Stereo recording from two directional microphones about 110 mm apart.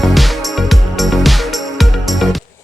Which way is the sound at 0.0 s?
Centre (ahead or behind).